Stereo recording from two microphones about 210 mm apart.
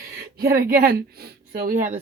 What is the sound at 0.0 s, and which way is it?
Speech, 45° right (ahead or behind).